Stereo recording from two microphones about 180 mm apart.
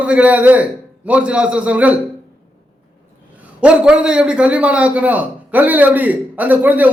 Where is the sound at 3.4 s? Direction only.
5° right (ahead or behind).